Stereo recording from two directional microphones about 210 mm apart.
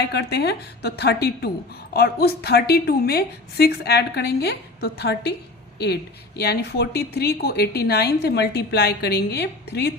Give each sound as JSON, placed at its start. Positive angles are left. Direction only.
{"t": 0.1, "sound": "a woman's voice", "side_deg": 50}
{"t": 6.4, "sound": "a woman's voice", "side_deg": 50}